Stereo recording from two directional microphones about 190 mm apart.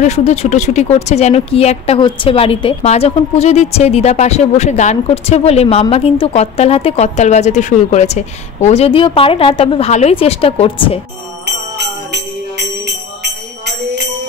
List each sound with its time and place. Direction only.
0.0 s speech: 35° left (ahead or behind)
12.1 s music: 60° right (ahead or behind)